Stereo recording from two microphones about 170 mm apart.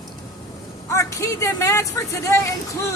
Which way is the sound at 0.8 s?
15° left (ahead or behind).